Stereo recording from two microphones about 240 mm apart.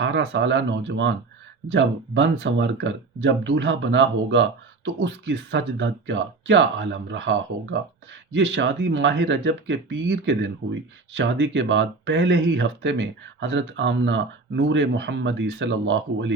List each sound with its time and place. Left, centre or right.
0.0 s speech: right